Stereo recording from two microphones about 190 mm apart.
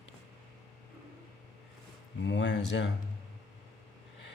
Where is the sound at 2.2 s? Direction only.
70° left (ahead or behind).